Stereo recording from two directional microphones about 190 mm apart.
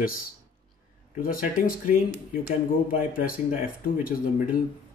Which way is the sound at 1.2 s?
45° left (ahead or behind).